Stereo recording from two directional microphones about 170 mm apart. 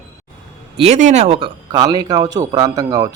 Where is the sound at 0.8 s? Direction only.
40° right (ahead or behind).